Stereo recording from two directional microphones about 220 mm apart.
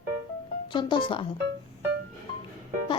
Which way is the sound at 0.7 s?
20° left (ahead or behind).